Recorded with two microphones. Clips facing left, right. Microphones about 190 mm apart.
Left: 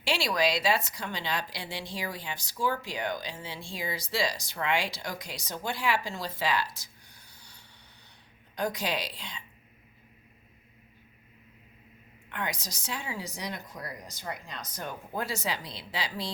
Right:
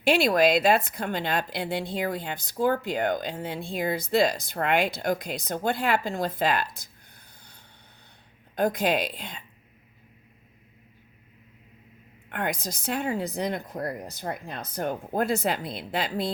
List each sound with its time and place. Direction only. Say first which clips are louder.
0.0 s a woman's voice: right 7 dB; 55° right (ahead or behind)
8.5 s a woman's voice: right 7 dB; 55° right (ahead or behind)
12.3 s a woman's voice: right 6 dB; 55° right (ahead or behind)